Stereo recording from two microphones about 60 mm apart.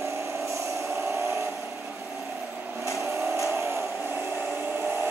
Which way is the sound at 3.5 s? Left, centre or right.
Right.